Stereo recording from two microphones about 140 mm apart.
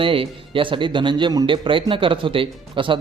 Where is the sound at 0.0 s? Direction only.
40° right (ahead or behind).